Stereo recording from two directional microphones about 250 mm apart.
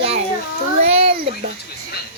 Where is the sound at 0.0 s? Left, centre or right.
Right.